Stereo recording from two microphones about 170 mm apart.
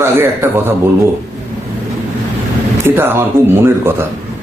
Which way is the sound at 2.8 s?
15° right (ahead or behind).